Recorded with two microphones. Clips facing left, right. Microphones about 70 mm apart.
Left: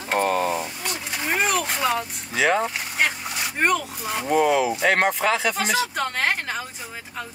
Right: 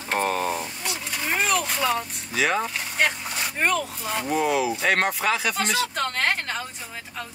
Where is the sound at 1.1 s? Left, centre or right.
Centre.